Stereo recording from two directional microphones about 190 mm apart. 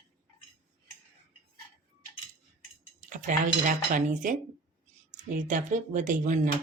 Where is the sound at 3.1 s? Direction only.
40° right (ahead or behind).